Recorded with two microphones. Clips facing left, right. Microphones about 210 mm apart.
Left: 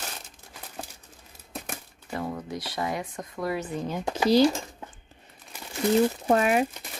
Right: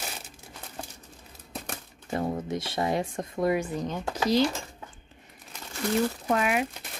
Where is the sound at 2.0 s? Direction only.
25° right (ahead or behind).